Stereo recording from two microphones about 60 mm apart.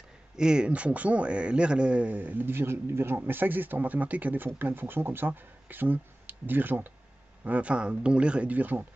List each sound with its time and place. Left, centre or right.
0.4 s a man's voice: centre; by 6.9 s right
7.4 s a man's voice: right